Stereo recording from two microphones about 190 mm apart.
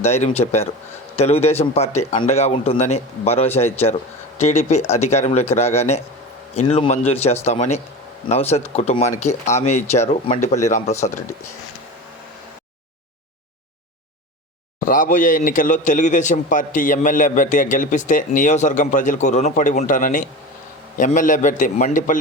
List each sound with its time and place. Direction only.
0.0 s a man's voice: 35° left (ahead or behind)
14.8 s a man's voice: 45° left (ahead or behind)